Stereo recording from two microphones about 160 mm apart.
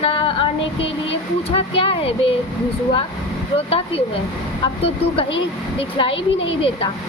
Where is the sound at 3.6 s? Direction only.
35° left (ahead or behind).